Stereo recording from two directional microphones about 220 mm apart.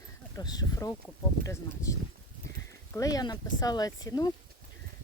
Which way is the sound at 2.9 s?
15° left (ahead or behind).